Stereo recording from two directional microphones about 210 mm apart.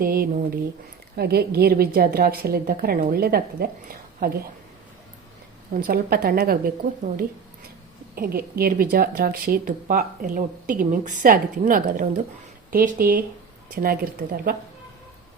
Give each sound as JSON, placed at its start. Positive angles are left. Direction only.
{"t": 0.0, "sound": "speech", "side_deg": -45}
{"t": 5.8, "sound": "speech", "side_deg": -45}